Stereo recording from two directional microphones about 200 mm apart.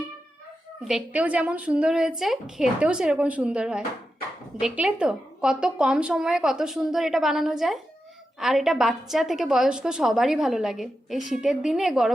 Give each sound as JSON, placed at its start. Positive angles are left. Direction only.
{"t": 0.9, "sound": "a woman's voice", "side_deg": -5}